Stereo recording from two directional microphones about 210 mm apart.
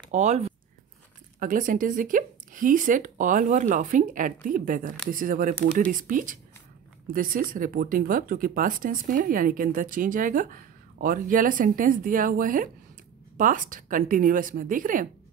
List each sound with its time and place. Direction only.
0.1 s speech: 35° right (ahead or behind)